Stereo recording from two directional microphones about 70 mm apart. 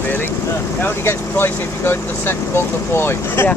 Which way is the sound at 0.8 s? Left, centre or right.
Left.